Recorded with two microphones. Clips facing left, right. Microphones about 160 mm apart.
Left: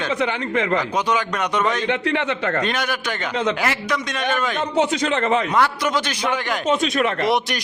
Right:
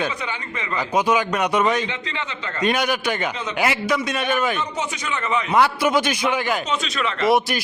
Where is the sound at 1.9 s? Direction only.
65° left (ahead or behind).